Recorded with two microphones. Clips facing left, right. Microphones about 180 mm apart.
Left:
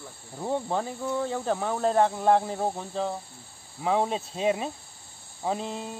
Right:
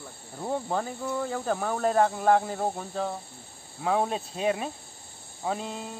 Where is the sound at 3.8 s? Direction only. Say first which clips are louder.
Left 1 dB; 20° left (ahead or behind).